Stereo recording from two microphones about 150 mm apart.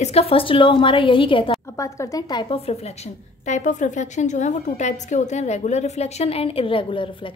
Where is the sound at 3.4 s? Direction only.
55° left (ahead or behind).